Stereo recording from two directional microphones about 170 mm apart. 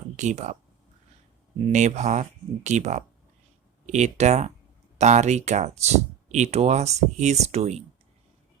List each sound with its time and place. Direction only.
0.2 s speech: 45° right (ahead or behind)
1.6 s speech: 45° right (ahead or behind)